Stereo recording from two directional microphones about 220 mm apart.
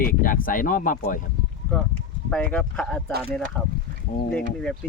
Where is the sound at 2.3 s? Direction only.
5° left (ahead or behind).